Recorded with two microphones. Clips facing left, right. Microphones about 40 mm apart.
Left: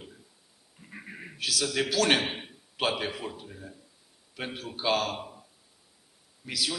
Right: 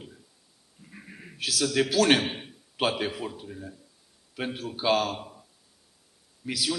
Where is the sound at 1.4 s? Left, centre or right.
Centre.